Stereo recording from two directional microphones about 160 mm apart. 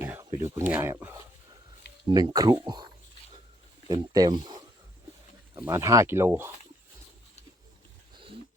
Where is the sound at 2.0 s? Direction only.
25° right (ahead or behind).